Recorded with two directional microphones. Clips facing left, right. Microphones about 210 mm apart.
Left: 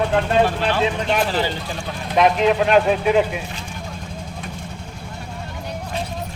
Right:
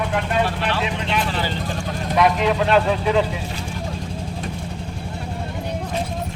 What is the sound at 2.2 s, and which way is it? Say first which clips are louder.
Speech: left 2 dB; 20° left (ahead or behind).